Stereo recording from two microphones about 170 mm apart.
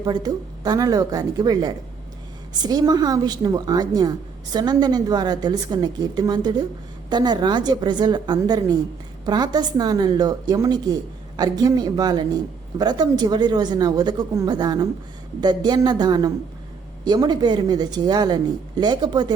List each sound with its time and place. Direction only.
0.0 s a woman's voice: 25° right (ahead or behind)